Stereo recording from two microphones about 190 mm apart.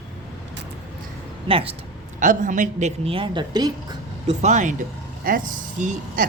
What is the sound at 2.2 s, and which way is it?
Speech, 40° right (ahead or behind).